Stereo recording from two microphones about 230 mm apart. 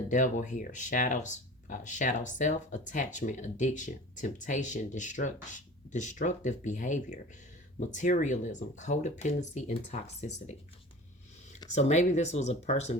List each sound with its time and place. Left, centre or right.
0.1 s speech: left
11.7 s speech: left